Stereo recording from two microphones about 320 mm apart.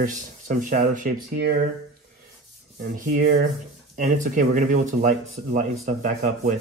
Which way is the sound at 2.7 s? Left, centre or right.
Right.